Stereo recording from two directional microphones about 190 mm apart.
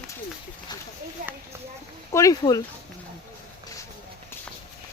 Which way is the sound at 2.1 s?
15° left (ahead or behind).